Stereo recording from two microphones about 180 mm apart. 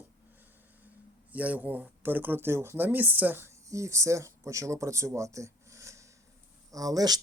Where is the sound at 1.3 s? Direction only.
10° right (ahead or behind).